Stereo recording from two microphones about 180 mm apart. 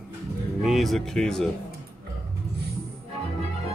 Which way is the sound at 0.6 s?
Centre (ahead or behind).